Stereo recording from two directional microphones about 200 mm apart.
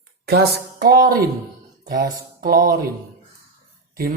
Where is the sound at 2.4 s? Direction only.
45° right (ahead or behind).